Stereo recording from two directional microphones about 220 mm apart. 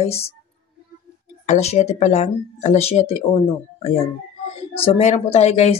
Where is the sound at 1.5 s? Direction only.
30° left (ahead or behind).